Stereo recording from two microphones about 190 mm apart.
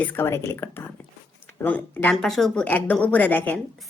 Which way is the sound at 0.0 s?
10° left (ahead or behind).